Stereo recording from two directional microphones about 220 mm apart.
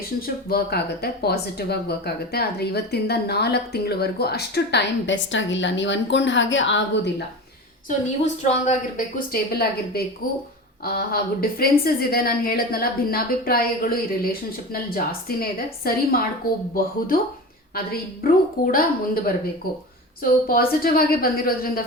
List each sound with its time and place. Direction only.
0.2 s speech: 45° left (ahead or behind)
7.9 s a woman's voice: 30° left (ahead or behind)
17.7 s a woman's voice: 40° left (ahead or behind)
20.5 s a woman's voice: 40° left (ahead or behind)